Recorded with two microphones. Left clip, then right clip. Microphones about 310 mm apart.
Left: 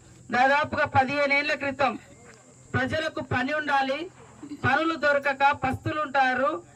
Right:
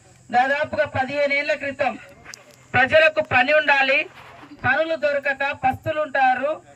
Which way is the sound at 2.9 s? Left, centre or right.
Centre.